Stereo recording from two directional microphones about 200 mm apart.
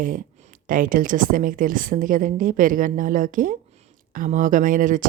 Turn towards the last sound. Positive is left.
turn(degrees=-40)  # may be behind; listen again after turning